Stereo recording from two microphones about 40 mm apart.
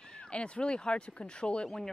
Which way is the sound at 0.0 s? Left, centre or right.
Left.